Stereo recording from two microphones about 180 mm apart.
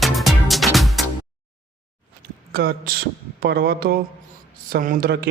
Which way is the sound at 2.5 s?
55° right (ahead or behind).